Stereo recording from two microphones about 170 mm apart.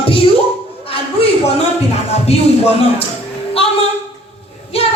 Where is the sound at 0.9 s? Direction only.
35° left (ahead or behind).